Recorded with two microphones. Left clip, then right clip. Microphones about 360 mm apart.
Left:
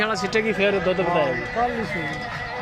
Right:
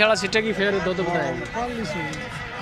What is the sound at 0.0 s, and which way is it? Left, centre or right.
Speech, centre.